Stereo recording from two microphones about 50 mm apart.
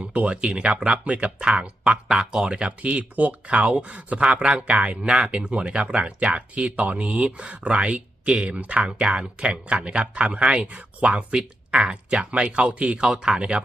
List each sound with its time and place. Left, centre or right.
0.0 s speech: right
8.8 s speech: centre